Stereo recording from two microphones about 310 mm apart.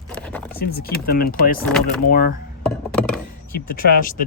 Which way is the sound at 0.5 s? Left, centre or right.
Left.